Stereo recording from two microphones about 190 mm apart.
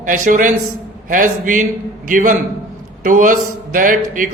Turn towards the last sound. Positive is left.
turn(degrees=-45)  # may be behind; listen again after turning